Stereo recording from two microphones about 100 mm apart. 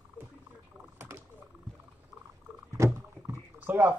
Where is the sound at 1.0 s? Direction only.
25° right (ahead or behind).